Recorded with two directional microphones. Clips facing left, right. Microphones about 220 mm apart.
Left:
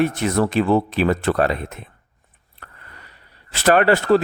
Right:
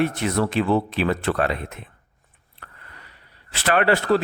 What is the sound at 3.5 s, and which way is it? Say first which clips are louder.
Speech: left 4 dB; 45° left (ahead or behind).